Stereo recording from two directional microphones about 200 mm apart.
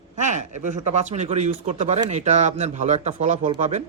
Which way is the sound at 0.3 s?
35° right (ahead or behind).